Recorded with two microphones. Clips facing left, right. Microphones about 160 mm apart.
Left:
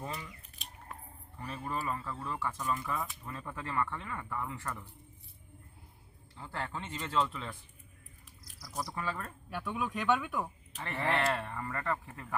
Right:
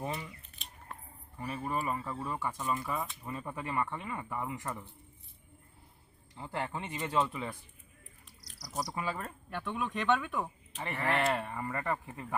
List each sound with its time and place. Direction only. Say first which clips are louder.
0.0 s speech: right 3 dB; 20° right (ahead or behind)
1.4 s speech: right 3 dB; 15° right (ahead or behind)
6.3 s speech: right 3 dB; 15° right (ahead or behind)
8.9 s speech: even; 15° right (ahead or behind)
9.5 s speech: even; 5° left (ahead or behind)
11.1 s speech: right 1 dB; 15° right (ahead or behind)